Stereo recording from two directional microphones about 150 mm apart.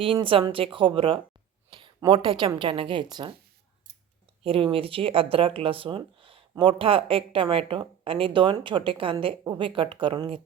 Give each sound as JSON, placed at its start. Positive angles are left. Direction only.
{"t": 0.0, "sound": "speech", "side_deg": -35}
{"t": 4.4, "sound": "speech", "side_deg": -35}